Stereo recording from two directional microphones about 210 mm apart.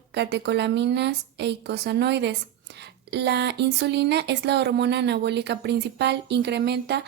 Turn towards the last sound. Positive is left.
turn(degrees=-50)  # may be behind; listen again after turning